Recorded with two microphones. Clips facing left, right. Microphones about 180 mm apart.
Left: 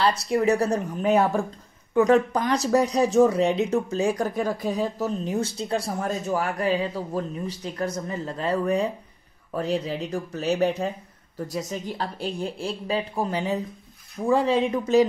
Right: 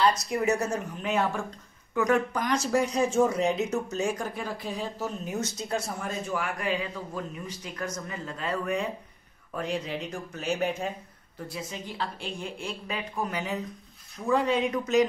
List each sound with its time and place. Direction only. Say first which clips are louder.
0.3 s speech: left 5 dB; 35° left (ahead or behind)